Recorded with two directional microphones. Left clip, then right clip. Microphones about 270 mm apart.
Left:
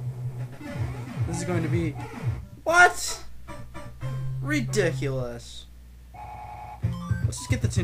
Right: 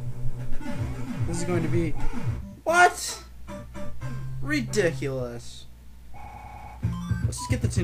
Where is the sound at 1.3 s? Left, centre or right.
Centre.